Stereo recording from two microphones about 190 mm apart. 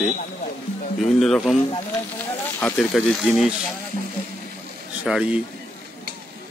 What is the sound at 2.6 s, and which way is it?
Speech, 5° left (ahead or behind).